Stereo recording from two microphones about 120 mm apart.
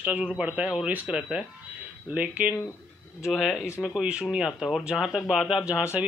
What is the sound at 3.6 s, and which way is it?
Speech, 20° left (ahead or behind).